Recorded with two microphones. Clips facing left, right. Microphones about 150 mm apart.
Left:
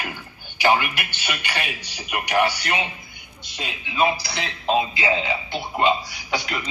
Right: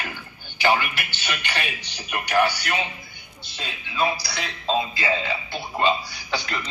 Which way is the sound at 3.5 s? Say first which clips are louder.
Left 3 dB; 20° left (ahead or behind).